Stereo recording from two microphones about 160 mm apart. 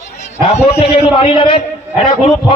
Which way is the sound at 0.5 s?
40° left (ahead or behind).